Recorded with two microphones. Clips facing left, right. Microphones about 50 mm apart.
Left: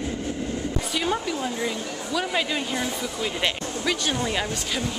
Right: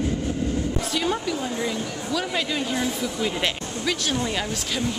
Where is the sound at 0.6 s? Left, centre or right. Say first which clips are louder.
Right 2 dB; centre.